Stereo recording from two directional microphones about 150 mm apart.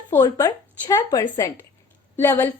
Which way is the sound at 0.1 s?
20° left (ahead or behind).